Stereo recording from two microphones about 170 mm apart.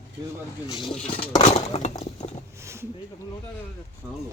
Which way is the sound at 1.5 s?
40° left (ahead or behind).